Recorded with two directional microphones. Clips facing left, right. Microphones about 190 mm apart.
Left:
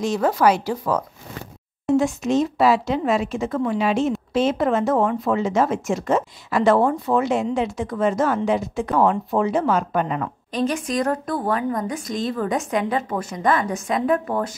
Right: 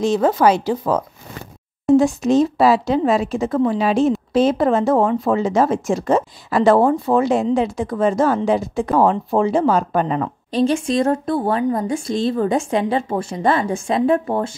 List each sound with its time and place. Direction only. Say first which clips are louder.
0.0 s speech: right 3 dB; 25° right (ahead or behind)